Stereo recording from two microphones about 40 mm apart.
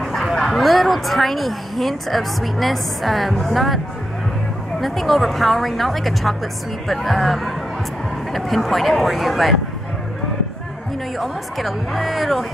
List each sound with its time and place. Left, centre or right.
0.0 s a woman's voice: centre
11.1 s speech: centre